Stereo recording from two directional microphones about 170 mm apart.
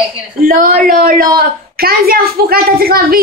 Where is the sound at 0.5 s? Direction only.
55° right (ahead or behind).